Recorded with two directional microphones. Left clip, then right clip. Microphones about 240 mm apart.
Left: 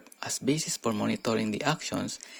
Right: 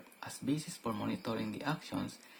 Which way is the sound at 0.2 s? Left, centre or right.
Left.